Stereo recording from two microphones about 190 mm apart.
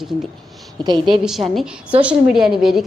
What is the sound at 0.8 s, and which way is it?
Speech, 25° right (ahead or behind).